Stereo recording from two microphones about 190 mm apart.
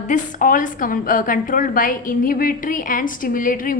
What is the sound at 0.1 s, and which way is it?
A woman's voice, 45° left (ahead or behind).